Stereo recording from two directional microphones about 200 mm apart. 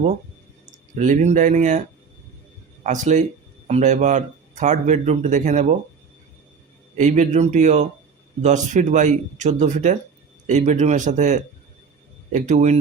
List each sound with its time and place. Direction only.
0.9 s speech: 40° right (ahead or behind)
2.8 s speech: 40° right (ahead or behind)
6.9 s speech: 40° right (ahead or behind)